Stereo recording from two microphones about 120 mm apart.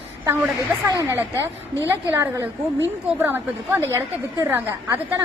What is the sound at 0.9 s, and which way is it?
A woman's voice, 25° right (ahead or behind).